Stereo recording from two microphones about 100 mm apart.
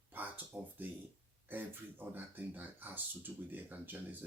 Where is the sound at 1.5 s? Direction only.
20° right (ahead or behind).